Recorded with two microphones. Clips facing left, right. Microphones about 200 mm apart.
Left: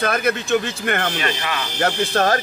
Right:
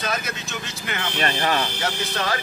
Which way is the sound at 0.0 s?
55° left (ahead or behind).